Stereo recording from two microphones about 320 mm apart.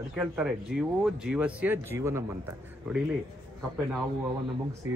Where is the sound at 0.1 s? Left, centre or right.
Centre.